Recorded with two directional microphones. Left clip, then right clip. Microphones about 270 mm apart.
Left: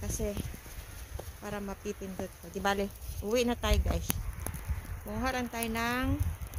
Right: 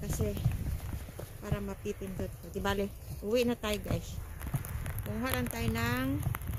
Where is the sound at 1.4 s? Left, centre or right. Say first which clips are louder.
Left 1 dB; centre.